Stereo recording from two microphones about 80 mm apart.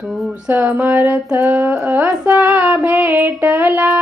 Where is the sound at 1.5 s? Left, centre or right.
Centre.